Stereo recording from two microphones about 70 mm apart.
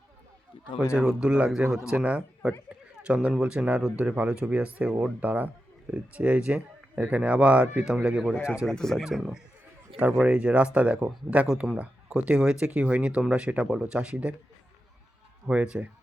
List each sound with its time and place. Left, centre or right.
0.9 s speech: centre
8.4 s speech: left
8.6 s speech: centre
9.0 s speech: centre
15.4 s speech: centre